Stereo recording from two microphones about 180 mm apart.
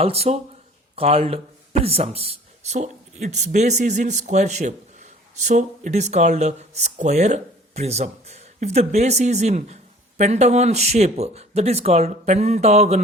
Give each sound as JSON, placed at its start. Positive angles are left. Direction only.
{"t": 0.0, "sound": "speech", "side_deg": -35}